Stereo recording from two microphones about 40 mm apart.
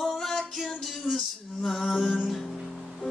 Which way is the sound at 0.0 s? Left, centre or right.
Centre.